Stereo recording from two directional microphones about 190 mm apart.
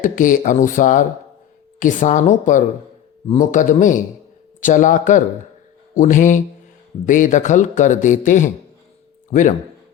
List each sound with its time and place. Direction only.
0.0 s speech: 45° left (ahead or behind)